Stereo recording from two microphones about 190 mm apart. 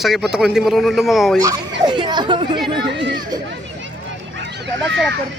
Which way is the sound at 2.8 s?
65° right (ahead or behind).